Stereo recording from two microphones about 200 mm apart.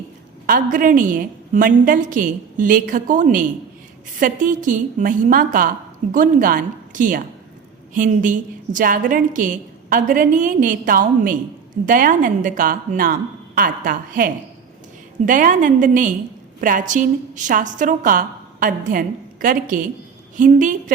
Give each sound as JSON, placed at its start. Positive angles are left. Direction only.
{"t": 0.4, "sound": "a woman's voice", "side_deg": -40}